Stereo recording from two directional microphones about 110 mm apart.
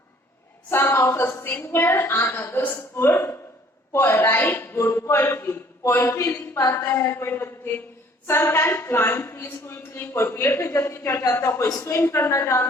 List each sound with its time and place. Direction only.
0.7 s a woman's voice: 20° left (ahead or behind)